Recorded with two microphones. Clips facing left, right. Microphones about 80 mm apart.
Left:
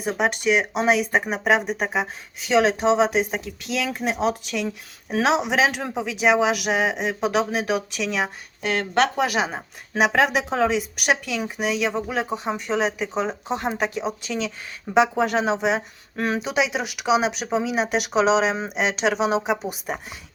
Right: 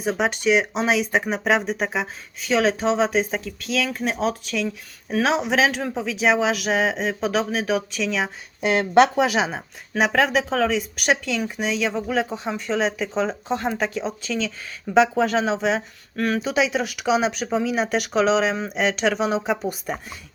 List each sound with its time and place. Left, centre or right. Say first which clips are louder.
0.0 s speech: right 1 dB; centre
8.6 s speech: right 5 dB; centre
9.2 s speech: right 2 dB; centre
10.0 s speech: even; centre